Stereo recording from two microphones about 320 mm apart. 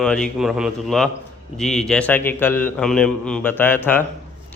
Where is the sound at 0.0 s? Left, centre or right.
Centre.